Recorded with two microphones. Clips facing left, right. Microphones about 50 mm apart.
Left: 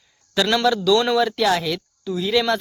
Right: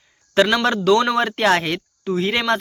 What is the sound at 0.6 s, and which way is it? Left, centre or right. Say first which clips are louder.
Speech: right 1 dB; right.